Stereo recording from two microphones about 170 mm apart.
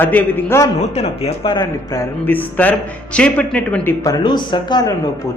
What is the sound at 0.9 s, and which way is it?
Speech, 35° left (ahead or behind).